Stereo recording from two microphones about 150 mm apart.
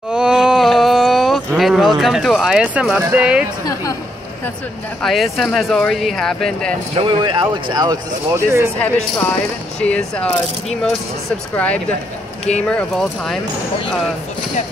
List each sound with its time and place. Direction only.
0.1 s a sound: 5° right (ahead or behind)
3.0 s speech: 10° right (ahead or behind)
5.0 s speech: centre (ahead or behind)
7.0 s speech: 35° right (ahead or behind); by 8.6 s 20° right (ahead or behind)
9.8 s speech: 5° left (ahead or behind)